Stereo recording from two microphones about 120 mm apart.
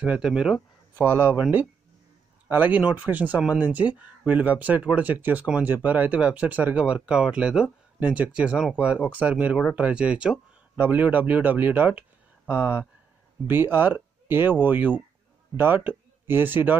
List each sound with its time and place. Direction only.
0.0 s speech: 10° right (ahead or behind)
0.9 s speech: 20° right (ahead or behind)